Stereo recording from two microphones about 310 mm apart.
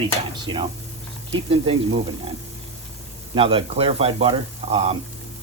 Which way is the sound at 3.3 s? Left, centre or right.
Centre.